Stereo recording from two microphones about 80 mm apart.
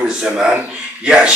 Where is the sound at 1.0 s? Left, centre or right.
Centre.